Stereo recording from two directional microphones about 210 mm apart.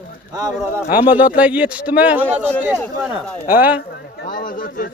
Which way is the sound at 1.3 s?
5° right (ahead or behind).